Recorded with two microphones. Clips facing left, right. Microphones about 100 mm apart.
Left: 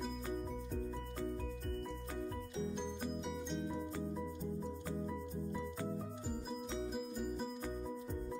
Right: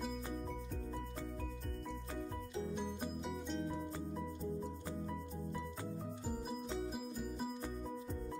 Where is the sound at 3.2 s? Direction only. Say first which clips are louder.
Even; centre (ahead or behind).